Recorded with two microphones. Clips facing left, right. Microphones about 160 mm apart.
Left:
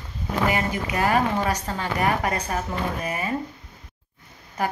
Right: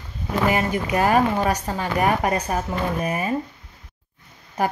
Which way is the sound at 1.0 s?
20° right (ahead or behind).